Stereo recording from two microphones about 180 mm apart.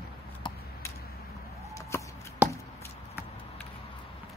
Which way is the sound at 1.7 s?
15° left (ahead or behind).